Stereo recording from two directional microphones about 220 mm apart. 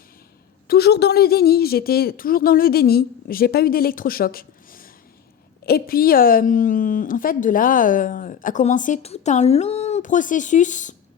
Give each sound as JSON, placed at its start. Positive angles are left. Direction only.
{"t": 0.7, "sound": "a woman's voice", "side_deg": 50}